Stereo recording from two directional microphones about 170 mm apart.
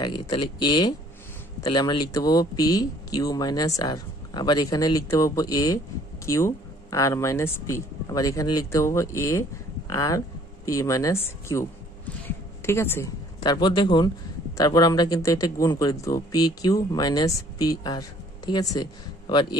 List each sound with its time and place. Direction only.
0.0 s speech: 25° left (ahead or behind)
12.3 s a sound: 15° left (ahead or behind)
13.4 s speech: 25° left (ahead or behind)